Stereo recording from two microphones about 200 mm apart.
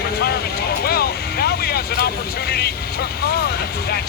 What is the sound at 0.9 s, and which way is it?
Vehicle, 50° left (ahead or behind).